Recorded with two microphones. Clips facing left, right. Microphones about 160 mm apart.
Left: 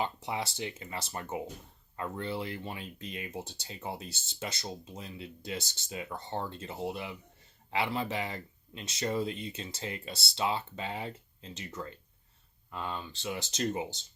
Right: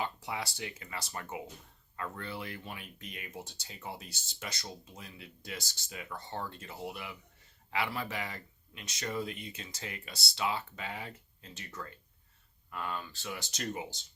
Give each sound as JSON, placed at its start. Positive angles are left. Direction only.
{"t": 0.0, "sound": "speech", "side_deg": 25}